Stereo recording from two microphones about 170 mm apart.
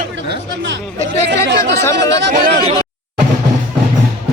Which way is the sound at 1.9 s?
90° right.